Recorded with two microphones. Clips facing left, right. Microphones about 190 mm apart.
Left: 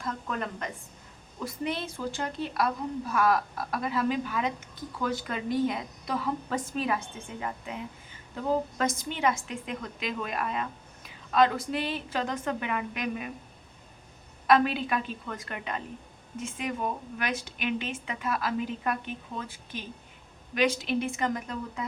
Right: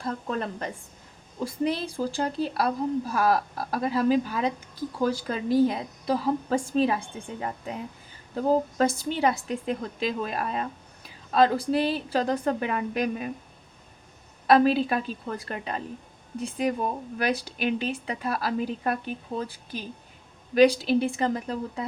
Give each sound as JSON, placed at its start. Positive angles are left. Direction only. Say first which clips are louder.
{"t": 0.0, "sound": "a woman's voice", "louder": "right 4 dB", "side_deg": -35}
{"t": 14.4, "sound": "a woman's voice", "louder": "right 4 dB", "side_deg": -35}